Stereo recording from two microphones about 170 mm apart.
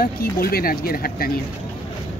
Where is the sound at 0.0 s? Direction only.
60° left (ahead or behind).